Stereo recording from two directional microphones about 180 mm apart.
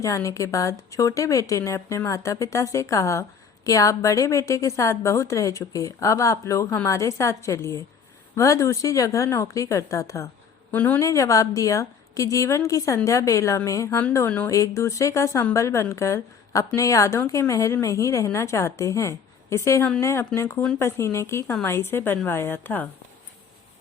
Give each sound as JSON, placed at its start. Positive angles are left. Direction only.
{"t": 0.0, "sound": "a woman's voice", "side_deg": 15}